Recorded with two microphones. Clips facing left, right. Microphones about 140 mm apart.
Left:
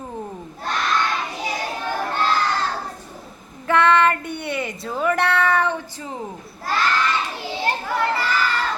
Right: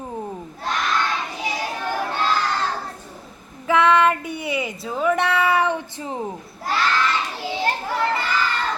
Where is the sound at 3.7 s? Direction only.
Centre (ahead or behind); by 6.1 s 20° right (ahead or behind).